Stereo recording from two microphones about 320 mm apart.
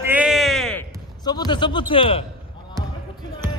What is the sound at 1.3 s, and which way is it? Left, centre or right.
Speech, centre.